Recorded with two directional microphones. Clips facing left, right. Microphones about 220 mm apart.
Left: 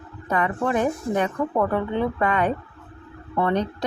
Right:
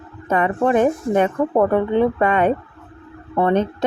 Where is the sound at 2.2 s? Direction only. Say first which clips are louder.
Right 5 dB; 25° right (ahead or behind).